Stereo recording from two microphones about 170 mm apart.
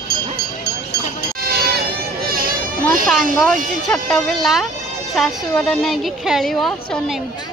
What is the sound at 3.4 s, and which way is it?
A woman's voice, 5° left (ahead or behind).